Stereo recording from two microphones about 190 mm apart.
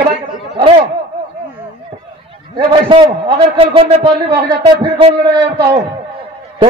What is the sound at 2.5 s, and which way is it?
A man's voice, 25° right (ahead or behind).